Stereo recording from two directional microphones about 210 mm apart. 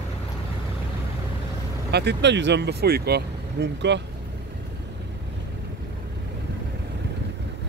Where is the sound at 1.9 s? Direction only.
55° right (ahead or behind).